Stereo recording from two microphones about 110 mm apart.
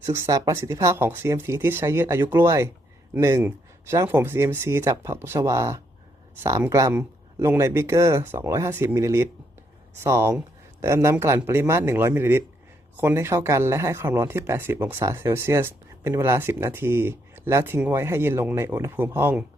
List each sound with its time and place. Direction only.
0.0 s speech: 30° right (ahead or behind)